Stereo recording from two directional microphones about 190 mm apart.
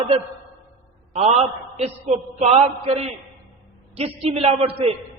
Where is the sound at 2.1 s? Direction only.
35° right (ahead or behind).